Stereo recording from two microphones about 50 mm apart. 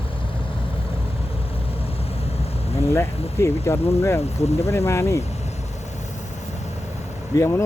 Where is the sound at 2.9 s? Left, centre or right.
Left.